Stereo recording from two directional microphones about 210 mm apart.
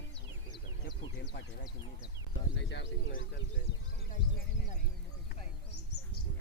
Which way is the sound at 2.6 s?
55° left (ahead or behind).